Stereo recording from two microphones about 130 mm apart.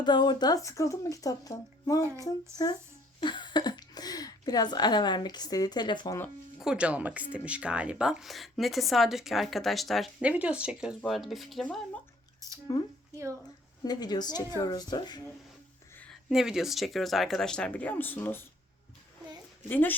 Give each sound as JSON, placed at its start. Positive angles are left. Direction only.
{"t": 0.0, "sound": "speech", "side_deg": 35}
{"t": 6.6, "sound": "speech", "side_deg": -5}
{"t": 10.2, "sound": "speech", "side_deg": -10}
{"t": 12.7, "sound": "a woman's voice", "side_deg": 25}
{"t": 16.3, "sound": "speech", "side_deg": -5}
{"t": 19.6, "sound": "a woman's voice", "side_deg": 15}